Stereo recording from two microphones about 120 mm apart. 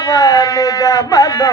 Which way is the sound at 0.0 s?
30° left (ahead or behind).